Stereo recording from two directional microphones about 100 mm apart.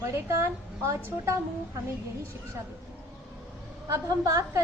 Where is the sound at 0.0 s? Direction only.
25° right (ahead or behind).